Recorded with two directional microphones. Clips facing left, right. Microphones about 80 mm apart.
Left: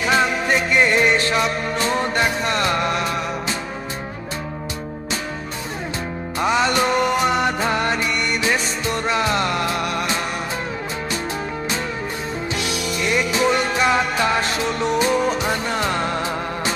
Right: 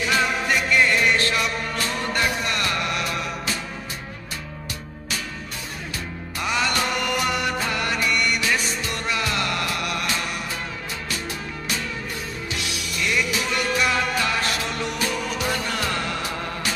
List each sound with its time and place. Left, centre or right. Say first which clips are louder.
0.0 s music: left 4 dB; left
6.4 s music: left 6 dB; left
13.0 s music: left 5 dB; left